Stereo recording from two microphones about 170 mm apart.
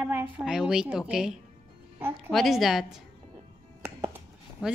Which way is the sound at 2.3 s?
Centre (ahead or behind).